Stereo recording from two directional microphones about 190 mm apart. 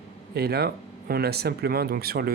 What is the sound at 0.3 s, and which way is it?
Speech, 55° right (ahead or behind).